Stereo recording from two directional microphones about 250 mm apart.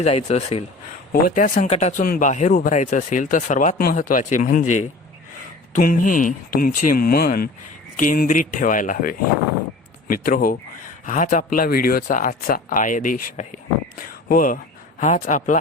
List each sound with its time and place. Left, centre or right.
0.0 s speech: left
5.7 s speech: left